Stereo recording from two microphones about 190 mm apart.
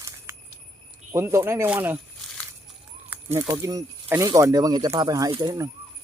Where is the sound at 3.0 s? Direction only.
10° right (ahead or behind).